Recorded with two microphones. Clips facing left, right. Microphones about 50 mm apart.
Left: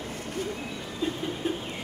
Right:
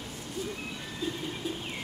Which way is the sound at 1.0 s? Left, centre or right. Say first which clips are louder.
Left 5 dB; left.